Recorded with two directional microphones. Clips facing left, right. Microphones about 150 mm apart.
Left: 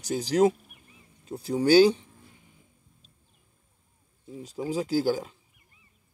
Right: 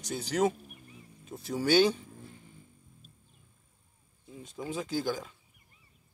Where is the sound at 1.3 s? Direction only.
25° left (ahead or behind).